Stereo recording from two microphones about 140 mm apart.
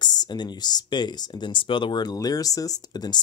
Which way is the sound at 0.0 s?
30° left (ahead or behind).